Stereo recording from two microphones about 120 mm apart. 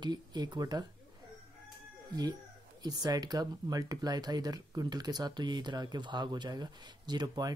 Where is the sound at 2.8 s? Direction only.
30° right (ahead or behind).